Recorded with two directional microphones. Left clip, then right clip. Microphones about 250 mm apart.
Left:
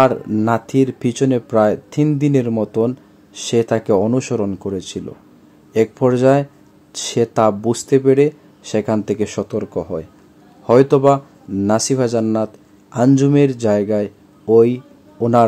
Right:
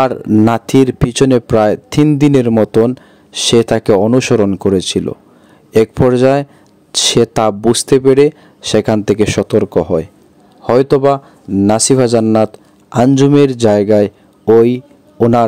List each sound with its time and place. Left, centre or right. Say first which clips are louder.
0.0 s speech: right 3 dB; right